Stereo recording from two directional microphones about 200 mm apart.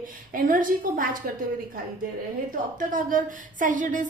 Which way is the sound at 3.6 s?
40° right (ahead or behind).